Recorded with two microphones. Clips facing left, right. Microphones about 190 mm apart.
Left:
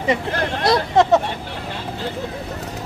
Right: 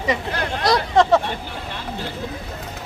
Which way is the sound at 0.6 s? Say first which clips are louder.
Left 1 dB; 20° left (ahead or behind).